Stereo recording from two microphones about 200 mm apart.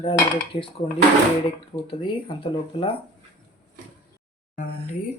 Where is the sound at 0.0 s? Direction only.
25° left (ahead or behind).